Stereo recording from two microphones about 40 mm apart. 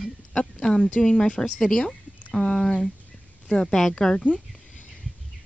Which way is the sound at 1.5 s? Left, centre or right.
Centre.